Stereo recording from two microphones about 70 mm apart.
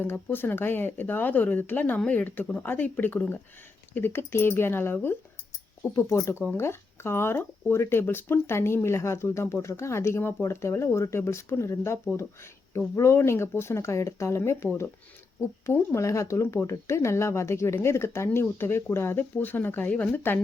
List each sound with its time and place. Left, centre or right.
0.0 s speech: left
5.9 s speech: left
6.6 s speech: left